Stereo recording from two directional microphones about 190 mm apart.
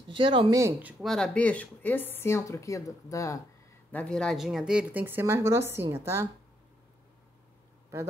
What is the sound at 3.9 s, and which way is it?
Speech, 5° left (ahead or behind).